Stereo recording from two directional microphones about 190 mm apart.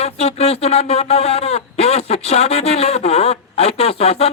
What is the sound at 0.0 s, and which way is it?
Speech, 35° left (ahead or behind).